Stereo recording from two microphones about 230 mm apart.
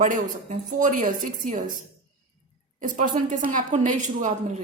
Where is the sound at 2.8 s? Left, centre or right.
Right.